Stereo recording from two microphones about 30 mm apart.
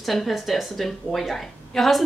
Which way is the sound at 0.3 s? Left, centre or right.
Centre.